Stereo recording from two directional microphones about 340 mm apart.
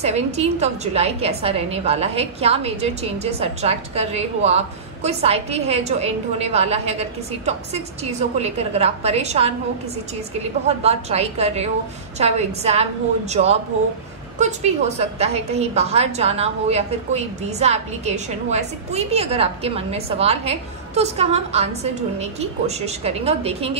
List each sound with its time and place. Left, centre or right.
0.0 s a woman's voice: centre
10.8 s a woman's voice: centre